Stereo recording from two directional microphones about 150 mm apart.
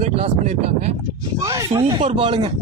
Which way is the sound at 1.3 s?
20° right (ahead or behind).